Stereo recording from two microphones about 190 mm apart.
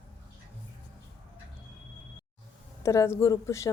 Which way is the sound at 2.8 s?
15° left (ahead or behind).